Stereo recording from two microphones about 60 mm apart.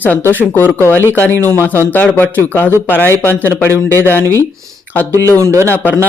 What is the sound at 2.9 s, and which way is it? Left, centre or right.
Speech, left.